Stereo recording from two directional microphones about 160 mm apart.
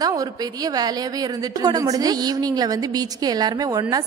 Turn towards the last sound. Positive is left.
turn(degrees=-25)  # may be behind; listen again after turning